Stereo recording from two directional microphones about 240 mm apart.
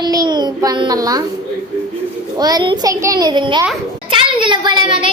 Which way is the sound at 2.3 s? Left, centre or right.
Centre.